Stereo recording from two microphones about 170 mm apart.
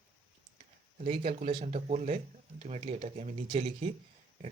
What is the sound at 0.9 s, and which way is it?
Speech, 40° right (ahead or behind).